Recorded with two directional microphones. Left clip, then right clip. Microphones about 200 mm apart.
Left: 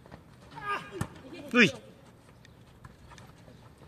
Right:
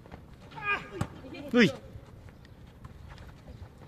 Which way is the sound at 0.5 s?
30° right (ahead or behind).